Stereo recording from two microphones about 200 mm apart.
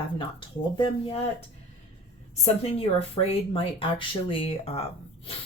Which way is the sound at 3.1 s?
30° left (ahead or behind).